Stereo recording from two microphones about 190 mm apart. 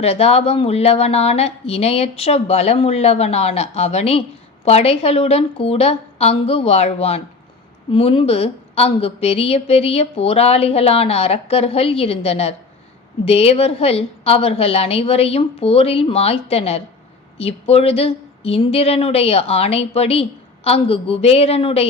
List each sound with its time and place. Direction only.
0.0 s a woman's voice: 30° left (ahead or behind)